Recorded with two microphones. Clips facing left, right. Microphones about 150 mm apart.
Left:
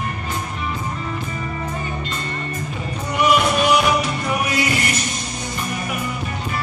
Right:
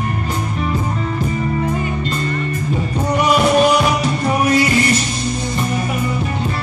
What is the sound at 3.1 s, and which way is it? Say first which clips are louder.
Music: right 3 dB; 35° right (ahead or behind).